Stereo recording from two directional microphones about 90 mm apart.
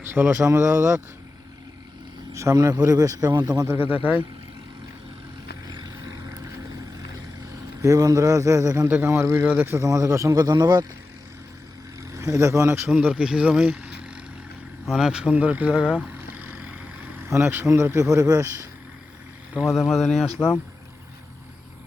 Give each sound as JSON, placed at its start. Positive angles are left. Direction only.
{"t": 0.0, "sound": "speech", "side_deg": -25}
{"t": 2.3, "sound": "a man's voice", "side_deg": -35}
{"t": 3.7, "sound": "speech", "side_deg": -20}
{"t": 5.6, "sound": "vehicle", "side_deg": -50}
{"t": 7.8, "sound": "speech", "side_deg": -40}
{"t": 8.9, "sound": "speech", "side_deg": -25}
{"t": 9.8, "sound": "speech", "side_deg": -40}
{"t": 10.4, "sound": "a man's voice", "side_deg": -50}
{"t": 12.1, "sound": "speech", "side_deg": -35}
{"t": 13.1, "sound": "speech", "side_deg": -10}
{"t": 14.8, "sound": "vehicle", "side_deg": -10}
{"t": 17.2, "sound": "speech", "side_deg": -30}
{"t": 19.5, "sound": "speech", "side_deg": -5}